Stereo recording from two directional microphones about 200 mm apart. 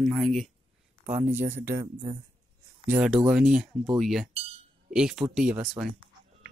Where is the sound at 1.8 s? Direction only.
25° right (ahead or behind).